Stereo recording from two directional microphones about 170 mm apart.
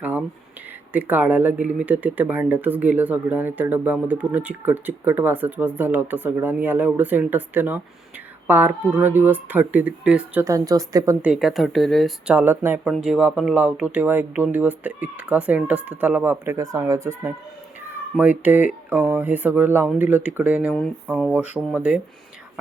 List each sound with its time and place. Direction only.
0.0 s a sound: 10° right (ahead or behind)
0.9 s speech: 10° right (ahead or behind)
10.4 s a woman's voice: 20° right (ahead or behind)
11.3 s speech: centre (ahead or behind)
12.4 s speech: 10° right (ahead or behind)